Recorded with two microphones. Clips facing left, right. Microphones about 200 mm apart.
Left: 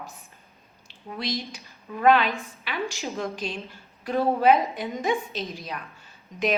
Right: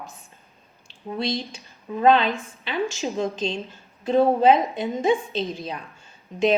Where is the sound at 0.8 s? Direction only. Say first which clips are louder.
Right 5 dB; 30° right (ahead or behind).